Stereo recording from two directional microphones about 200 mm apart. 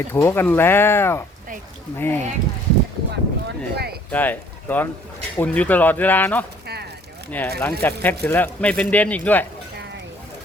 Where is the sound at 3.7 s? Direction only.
55° right (ahead or behind).